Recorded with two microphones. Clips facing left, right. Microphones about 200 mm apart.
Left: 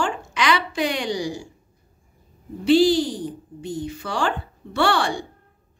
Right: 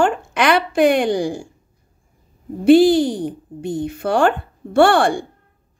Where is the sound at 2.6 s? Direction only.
55° right (ahead or behind).